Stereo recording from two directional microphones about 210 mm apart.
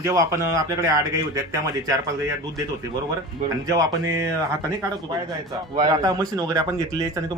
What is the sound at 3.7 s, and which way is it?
Speech, 15° right (ahead or behind).